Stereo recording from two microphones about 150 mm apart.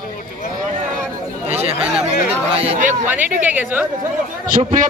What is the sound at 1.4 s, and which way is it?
Speech, 45° right (ahead or behind).